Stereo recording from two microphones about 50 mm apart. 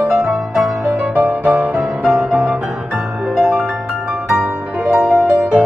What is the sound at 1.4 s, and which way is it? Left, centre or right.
Music, right.